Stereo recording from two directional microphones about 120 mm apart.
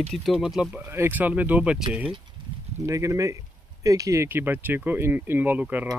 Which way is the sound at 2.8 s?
25° right (ahead or behind).